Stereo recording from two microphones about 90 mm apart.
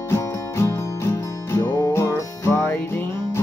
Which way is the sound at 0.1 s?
30° left (ahead or behind).